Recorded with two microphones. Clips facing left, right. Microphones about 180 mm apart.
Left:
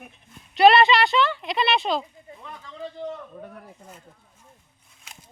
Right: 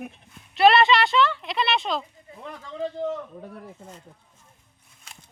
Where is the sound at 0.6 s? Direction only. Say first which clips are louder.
Left 2 dB; centre (ahead or behind).